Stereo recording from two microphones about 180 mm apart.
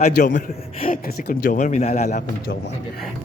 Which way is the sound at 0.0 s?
45° left (ahead or behind).